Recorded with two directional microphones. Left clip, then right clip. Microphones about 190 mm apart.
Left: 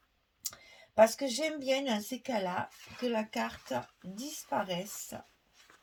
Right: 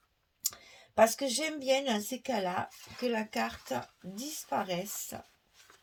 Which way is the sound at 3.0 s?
40° right (ahead or behind).